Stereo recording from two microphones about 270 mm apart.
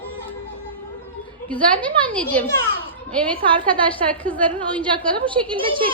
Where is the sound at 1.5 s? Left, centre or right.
Centre.